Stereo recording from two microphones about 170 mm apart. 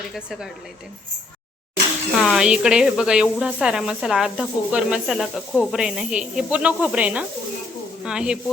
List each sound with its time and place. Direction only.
0.1 s speech: 5° right (ahead or behind)
2.1 s speech: centre (ahead or behind)